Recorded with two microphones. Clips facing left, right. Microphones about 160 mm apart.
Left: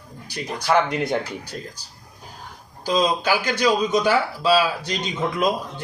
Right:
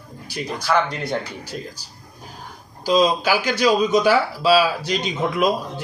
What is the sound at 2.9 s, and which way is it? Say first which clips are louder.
Speech: right 3 dB; 10° right (ahead or behind).